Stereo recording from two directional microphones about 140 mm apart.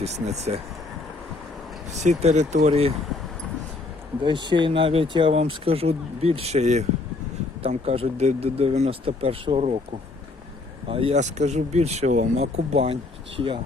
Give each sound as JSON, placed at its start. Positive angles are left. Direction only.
{"t": 0.0, "sound": "speech", "side_deg": -50}
{"t": 1.9, "sound": "speech", "side_deg": -55}
{"t": 4.2, "sound": "speech", "side_deg": -35}
{"t": 10.8, "sound": "speech", "side_deg": -40}
{"t": 11.2, "sound": "speech", "side_deg": -55}